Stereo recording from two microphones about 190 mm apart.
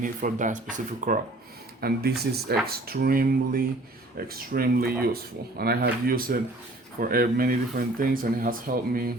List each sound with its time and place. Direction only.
0.0 s speech: 45° right (ahead or behind)